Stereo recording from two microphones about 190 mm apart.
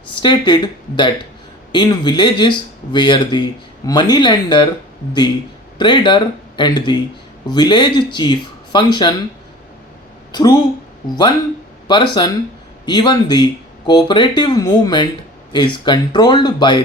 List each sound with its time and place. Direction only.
0.1 s speech: 25° left (ahead or behind)
5.8 s speech: 25° left (ahead or behind)
10.3 s speech: 20° left (ahead or behind)
11.9 s speech: 25° left (ahead or behind)